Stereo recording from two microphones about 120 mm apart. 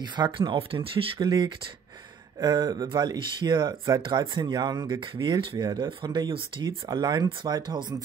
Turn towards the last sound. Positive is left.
turn(degrees=-35)  # may be behind; listen again after turning